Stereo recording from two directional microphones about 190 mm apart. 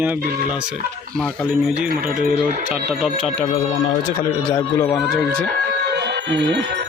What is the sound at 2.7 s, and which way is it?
Speech, 5° right (ahead or behind).